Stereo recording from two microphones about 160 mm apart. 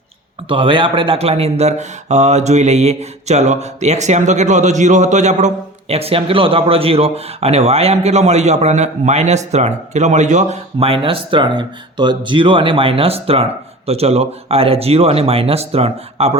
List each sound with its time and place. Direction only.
0.4 s speech: 30° right (ahead or behind)